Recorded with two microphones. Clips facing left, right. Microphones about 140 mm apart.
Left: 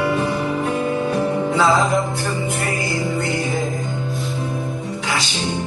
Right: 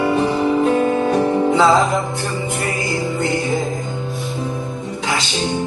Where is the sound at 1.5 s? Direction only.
20° right (ahead or behind).